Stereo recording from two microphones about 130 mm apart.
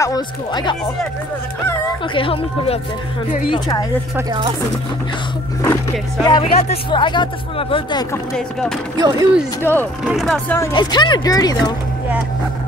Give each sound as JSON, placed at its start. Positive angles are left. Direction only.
{"t": 0.0, "sound": "speech", "side_deg": 30}
{"t": 2.1, "sound": "speech", "side_deg": 45}
{"t": 3.4, "sound": "speech", "side_deg": 35}
{"t": 4.3, "sound": "speech", "side_deg": -35}
{"t": 6.2, "sound": "speech", "side_deg": 35}
{"t": 8.4, "sound": "speech", "side_deg": 5}
{"t": 8.9, "sound": "speech", "side_deg": -30}
{"t": 9.6, "sound": "speech", "side_deg": 15}
{"t": 10.0, "sound": "speech", "side_deg": 0}
{"t": 10.7, "sound": "speech", "side_deg": 35}